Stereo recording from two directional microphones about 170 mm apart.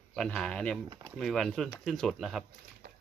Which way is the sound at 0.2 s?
5° left (ahead or behind).